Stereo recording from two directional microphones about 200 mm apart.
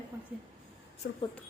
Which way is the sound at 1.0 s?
50° left (ahead or behind).